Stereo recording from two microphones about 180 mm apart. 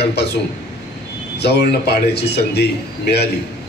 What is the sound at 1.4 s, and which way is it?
A man's voice, 65° left (ahead or behind).